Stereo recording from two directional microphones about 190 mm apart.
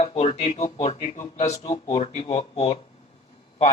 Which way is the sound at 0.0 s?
30° left (ahead or behind).